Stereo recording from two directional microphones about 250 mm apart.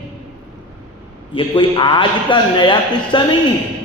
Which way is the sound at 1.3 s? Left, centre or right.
Centre.